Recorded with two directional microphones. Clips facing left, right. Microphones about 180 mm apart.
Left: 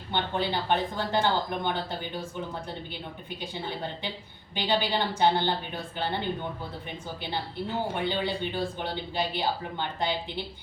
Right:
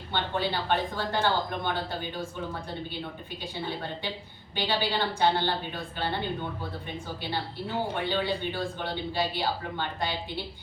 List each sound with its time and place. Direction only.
0.1 s speech: 15° left (ahead or behind)
4.5 s speech: 15° left (ahead or behind)
8.1 s speech: 15° left (ahead or behind)